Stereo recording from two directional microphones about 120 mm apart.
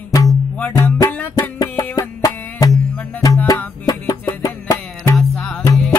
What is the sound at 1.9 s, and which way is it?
Music, 30° left (ahead or behind).